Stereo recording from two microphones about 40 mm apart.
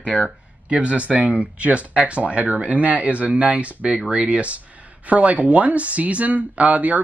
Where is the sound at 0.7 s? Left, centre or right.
Right.